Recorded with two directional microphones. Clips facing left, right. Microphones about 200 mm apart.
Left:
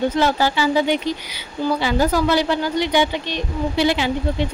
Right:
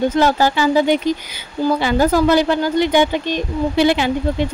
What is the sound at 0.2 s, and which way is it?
Speech, 45° right (ahead or behind).